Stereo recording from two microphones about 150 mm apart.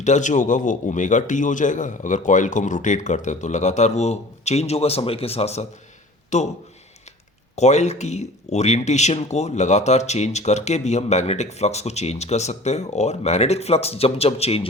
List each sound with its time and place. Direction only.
0.0 s a man's voice: 55° left (ahead or behind)
7.5 s speech: 50° left (ahead or behind)